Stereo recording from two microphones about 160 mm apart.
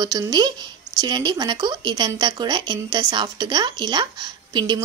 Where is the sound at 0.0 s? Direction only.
25° right (ahead or behind).